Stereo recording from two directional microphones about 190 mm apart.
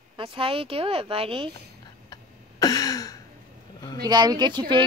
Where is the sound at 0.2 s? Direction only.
30° right (ahead or behind).